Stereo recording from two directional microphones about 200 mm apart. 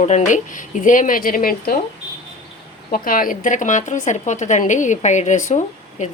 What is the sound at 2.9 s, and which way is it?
A woman's voice, 45° left (ahead or behind).